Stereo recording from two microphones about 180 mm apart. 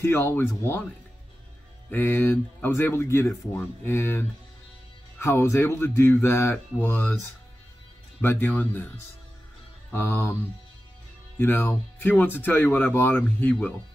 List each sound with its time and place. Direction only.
0.0 s speech: 15° left (ahead or behind)
1.9 s speech: 10° left (ahead or behind)
8.2 s speech: 10° left (ahead or behind)
9.8 s speech: 10° left (ahead or behind)
11.3 s speech: 10° left (ahead or behind)